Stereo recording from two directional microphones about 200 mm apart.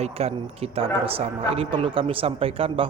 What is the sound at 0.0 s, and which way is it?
A man's voice, 30° right (ahead or behind).